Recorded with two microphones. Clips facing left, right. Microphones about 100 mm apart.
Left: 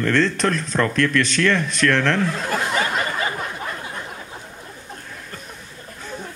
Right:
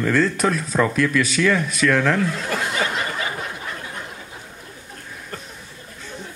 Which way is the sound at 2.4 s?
40° left (ahead or behind).